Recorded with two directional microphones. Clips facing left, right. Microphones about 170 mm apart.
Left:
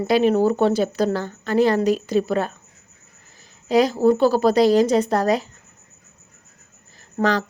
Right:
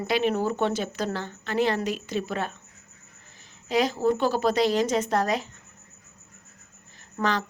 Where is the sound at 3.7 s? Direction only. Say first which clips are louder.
Left 7 dB; 40° left (ahead or behind).